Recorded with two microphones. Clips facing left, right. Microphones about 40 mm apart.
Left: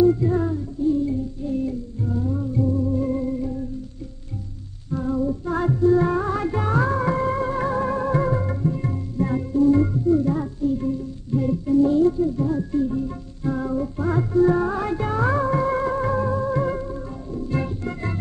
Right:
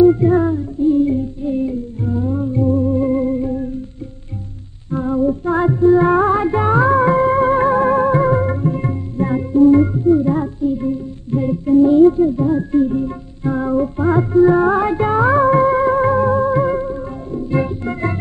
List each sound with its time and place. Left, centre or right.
0.0 s music: right
4.9 s music: right